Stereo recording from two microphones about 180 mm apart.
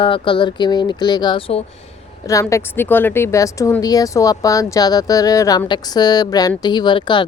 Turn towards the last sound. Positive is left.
turn(degrees=25)  # may be behind; listen again after turning